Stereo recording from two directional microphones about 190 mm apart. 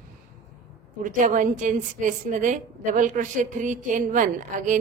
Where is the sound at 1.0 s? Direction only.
45° right (ahead or behind).